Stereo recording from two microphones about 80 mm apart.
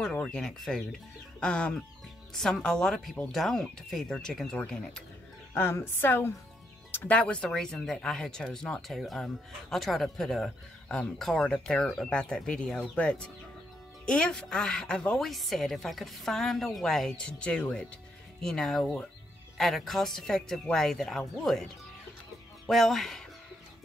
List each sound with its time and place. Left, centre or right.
0.0 s speech: centre
5.5 s a woman's voice: left; by 8.8 s centre
8.8 s speech: centre
22.7 s speech: centre